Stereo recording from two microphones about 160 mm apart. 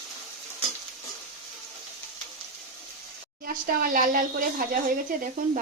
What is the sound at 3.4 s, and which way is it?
A woman's voice, 65° right (ahead or behind).